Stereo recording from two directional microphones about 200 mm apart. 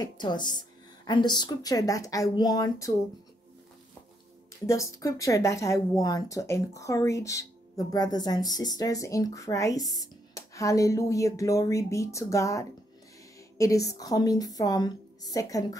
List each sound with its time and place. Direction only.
0.0 s a woman's voice: 20° left (ahead or behind)
4.6 s a woman's voice: 15° left (ahead or behind)